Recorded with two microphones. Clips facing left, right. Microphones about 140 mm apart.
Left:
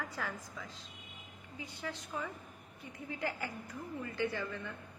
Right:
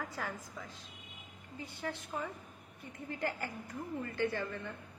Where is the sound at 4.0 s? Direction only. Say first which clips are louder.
Right 1 dB; 50° right (ahead or behind).